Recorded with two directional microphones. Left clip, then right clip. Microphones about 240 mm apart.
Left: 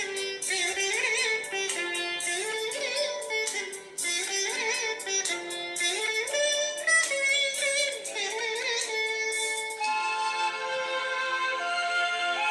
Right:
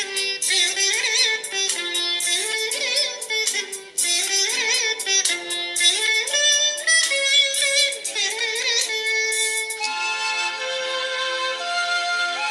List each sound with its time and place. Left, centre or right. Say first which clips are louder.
0.2 s music: right 12 dB; right